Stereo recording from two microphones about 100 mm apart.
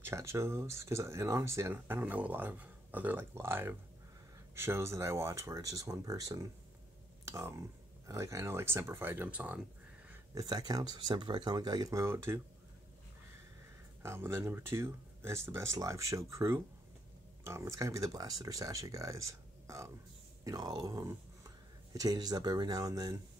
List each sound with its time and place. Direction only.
0.0 s speech: 30° right (ahead or behind)
10.3 s speech: 40° right (ahead or behind)
12.0 s speech: 25° right (ahead or behind)
14.0 s speech: 25° right (ahead or behind)
20.4 s speech: 40° right (ahead or behind)